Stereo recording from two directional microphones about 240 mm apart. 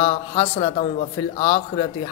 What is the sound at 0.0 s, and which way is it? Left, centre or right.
Speech, left.